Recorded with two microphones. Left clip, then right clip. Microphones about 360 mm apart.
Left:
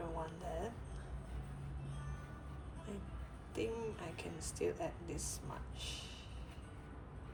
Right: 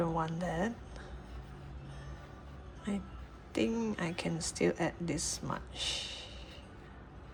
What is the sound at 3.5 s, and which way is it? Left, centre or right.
Speech, right.